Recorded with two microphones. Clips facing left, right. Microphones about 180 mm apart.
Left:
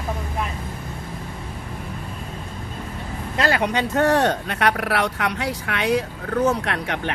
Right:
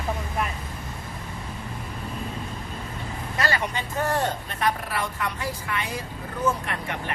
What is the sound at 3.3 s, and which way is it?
Speech, 75° left (ahead or behind).